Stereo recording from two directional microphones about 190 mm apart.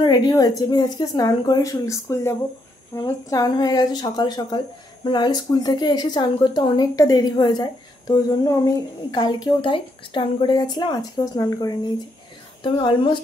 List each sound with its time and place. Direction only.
0.0 s a woman's voice: 25° left (ahead or behind)